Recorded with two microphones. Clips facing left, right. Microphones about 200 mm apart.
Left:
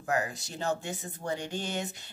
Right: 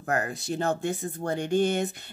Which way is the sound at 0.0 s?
55° right (ahead or behind).